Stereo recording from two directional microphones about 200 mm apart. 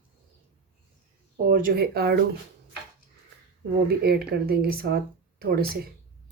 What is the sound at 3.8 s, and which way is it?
Speech, 55° right (ahead or behind).